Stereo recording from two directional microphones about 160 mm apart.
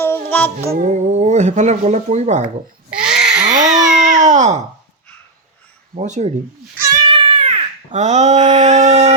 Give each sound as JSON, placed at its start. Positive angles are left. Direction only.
{"t": 0.0, "sound": "music", "side_deg": 10}
{"t": 0.7, "sound": "speech", "side_deg": -45}
{"t": 2.9, "sound": "babbling", "side_deg": -5}
{"t": 3.7, "sound": "a sound", "side_deg": -50}
{"t": 6.0, "sound": "speech", "side_deg": -45}
{"t": 7.0, "sound": "cat", "side_deg": -30}
{"t": 7.9, "sound": "speech", "side_deg": -45}